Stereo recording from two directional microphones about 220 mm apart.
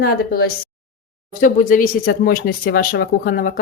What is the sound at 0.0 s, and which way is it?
Speech, 45° left (ahead or behind).